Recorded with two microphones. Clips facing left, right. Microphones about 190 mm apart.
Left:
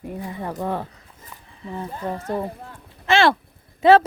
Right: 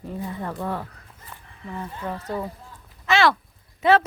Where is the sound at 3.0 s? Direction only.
30° left (ahead or behind).